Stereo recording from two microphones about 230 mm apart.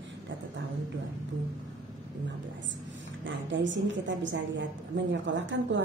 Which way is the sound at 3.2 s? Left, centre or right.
Right.